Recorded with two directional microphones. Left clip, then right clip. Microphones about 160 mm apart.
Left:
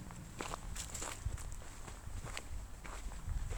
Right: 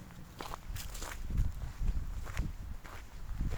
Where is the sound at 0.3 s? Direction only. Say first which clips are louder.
Even; 10° left (ahead or behind).